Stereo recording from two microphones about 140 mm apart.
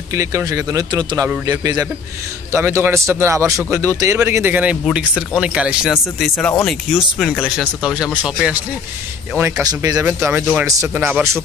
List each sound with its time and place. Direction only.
0.1 s a man's voice: 20° right (ahead or behind); by 8.2 s 5° right (ahead or behind)
9.4 s a man's voice: 25° right (ahead or behind)
10.0 s speech: 10° right (ahead or behind)